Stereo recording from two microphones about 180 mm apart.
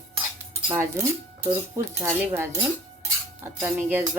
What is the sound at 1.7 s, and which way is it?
Music, 15° right (ahead or behind).